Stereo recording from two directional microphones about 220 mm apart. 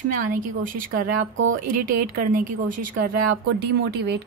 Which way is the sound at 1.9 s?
40° right (ahead or behind).